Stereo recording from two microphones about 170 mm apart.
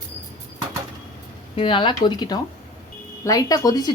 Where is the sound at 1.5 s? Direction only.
30° left (ahead or behind).